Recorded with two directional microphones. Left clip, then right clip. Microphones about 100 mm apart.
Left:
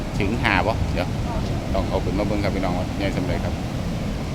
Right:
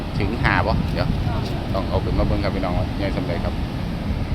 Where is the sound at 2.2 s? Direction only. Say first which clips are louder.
Even; 35° left (ahead or behind).